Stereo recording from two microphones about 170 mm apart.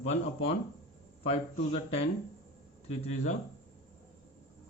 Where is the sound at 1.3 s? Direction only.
35° left (ahead or behind).